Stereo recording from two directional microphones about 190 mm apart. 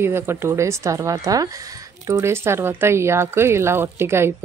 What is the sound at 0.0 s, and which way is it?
Speech, 10° right (ahead or behind).